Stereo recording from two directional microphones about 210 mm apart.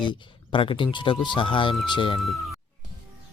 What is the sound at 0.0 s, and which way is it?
Speech, 25° left (ahead or behind).